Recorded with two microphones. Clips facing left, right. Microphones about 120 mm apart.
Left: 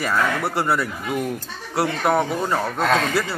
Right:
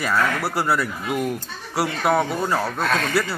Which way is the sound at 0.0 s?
Centre (ahead or behind).